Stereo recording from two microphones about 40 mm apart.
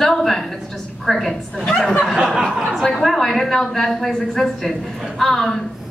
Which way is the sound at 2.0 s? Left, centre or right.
Centre.